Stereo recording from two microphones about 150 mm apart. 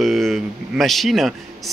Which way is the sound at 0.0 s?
Centre (ahead or behind).